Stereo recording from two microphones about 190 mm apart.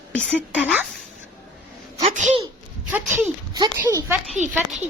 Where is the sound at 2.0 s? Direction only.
35° right (ahead or behind).